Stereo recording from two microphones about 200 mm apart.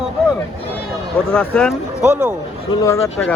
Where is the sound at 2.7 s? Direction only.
15° left (ahead or behind).